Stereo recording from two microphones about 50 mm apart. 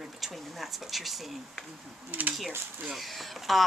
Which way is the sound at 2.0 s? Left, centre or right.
Right.